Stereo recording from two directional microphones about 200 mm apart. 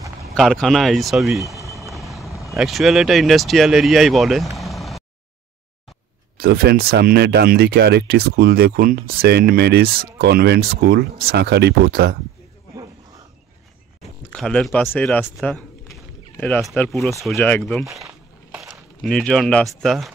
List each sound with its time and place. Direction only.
0.3 s speech: centre (ahead or behind)
1.7 s vehicle: centre (ahead or behind)
2.5 s speech: centre (ahead or behind)
6.3 s speech: 50° right (ahead or behind)
14.3 s speech: centre (ahead or behind)
17.8 s a sound: 15° right (ahead or behind)
18.6 s speech: centre (ahead or behind)